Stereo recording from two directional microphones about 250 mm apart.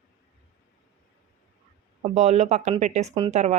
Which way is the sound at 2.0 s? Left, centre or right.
Right.